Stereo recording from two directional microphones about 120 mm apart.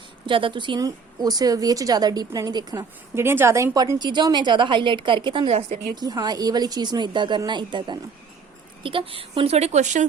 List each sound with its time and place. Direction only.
0.3 s a woman's voice: 45° right (ahead or behind)
3.2 s a woman's voice: 20° right (ahead or behind); by 5.5 s 40° right (ahead or behind)
5.5 s a woman's voice: 65° right (ahead or behind)
5.9 s a woman's voice: 35° right (ahead or behind); by 10.1 s 85° right